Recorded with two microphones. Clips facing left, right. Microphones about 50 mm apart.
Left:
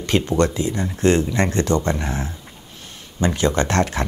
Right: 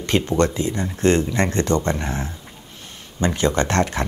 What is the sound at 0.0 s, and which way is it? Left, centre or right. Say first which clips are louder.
Speech: even; right.